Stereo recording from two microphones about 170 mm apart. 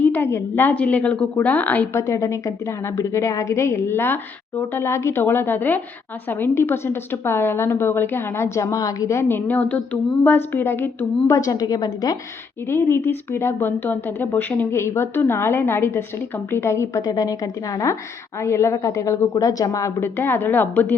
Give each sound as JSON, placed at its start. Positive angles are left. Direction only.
{"t": 0.0, "sound": "a woman's voice", "side_deg": 10}